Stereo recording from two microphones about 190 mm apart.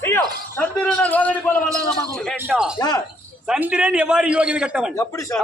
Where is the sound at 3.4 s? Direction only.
5° right (ahead or behind).